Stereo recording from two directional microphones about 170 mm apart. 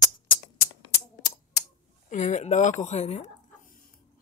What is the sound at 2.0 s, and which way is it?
Speech, 45° left (ahead or behind).